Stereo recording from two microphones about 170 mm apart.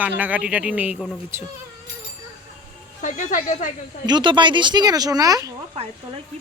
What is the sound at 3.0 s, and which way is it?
Speech, 50° left (ahead or behind).